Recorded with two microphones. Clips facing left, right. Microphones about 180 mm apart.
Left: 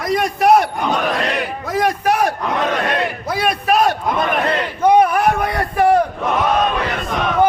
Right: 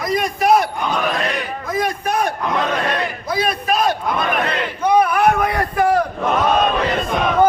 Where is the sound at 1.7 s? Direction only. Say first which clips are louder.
Left 3 dB; 80° left.